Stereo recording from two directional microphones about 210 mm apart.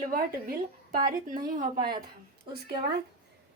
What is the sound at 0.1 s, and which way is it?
A woman's voice, 45° right (ahead or behind).